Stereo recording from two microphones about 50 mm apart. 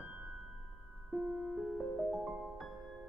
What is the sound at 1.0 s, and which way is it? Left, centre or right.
Music, centre.